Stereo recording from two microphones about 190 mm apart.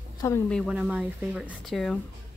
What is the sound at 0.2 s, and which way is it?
Speech, 15° left (ahead or behind).